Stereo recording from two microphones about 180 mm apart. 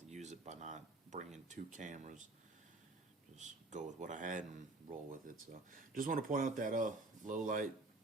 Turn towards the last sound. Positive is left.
turn(degrees=-45)  # may be behind; listen again after turning